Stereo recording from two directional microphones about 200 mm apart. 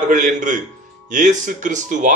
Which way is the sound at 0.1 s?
40° right (ahead or behind).